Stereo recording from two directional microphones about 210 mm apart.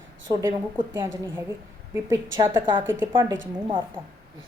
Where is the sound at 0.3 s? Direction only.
15° right (ahead or behind).